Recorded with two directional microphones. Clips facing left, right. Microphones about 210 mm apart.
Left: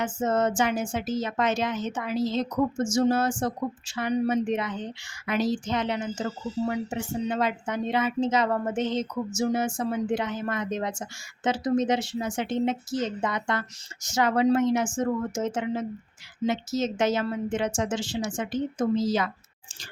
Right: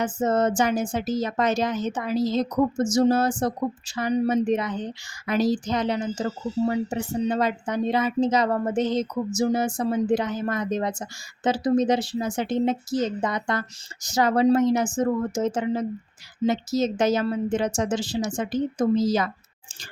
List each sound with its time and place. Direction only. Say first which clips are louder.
0.0 s speech: right 3 dB; 35° right (ahead or behind)